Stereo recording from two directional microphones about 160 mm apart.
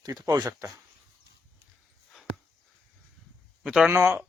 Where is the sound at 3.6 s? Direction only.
5° right (ahead or behind).